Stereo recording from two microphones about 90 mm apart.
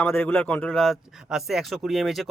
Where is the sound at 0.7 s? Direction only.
Centre (ahead or behind).